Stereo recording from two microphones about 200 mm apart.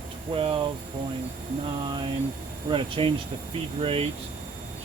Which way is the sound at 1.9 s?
20° right (ahead or behind).